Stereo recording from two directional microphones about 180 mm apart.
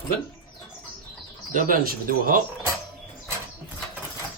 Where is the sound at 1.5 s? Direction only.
50° right (ahead or behind).